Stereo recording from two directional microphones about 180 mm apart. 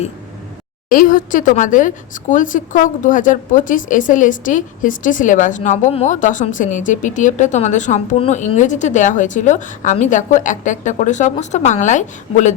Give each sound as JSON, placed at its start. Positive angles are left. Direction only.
{"t": 0.9, "sound": "a woman's voice", "side_deg": 50}